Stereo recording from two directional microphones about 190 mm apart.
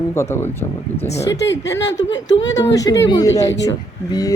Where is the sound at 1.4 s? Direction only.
70° left (ahead or behind).